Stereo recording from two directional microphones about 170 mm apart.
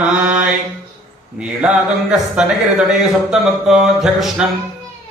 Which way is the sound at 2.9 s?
5° right (ahead or behind).